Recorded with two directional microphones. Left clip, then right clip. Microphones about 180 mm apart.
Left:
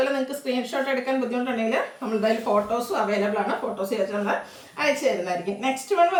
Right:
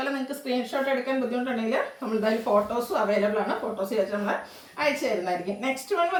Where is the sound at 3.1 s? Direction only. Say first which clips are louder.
Left 1 dB; 20° left (ahead or behind).